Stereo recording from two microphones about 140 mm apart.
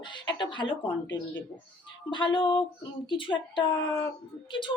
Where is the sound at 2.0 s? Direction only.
35° left (ahead or behind).